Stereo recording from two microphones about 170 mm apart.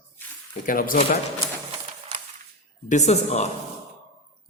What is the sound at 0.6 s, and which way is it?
Speech, 55° left (ahead or behind).